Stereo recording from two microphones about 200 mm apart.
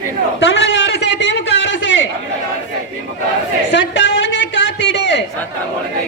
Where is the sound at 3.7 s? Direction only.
70° left (ahead or behind).